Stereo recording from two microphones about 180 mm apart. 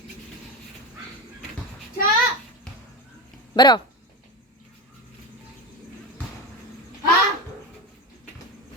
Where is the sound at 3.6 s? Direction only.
25° left (ahead or behind).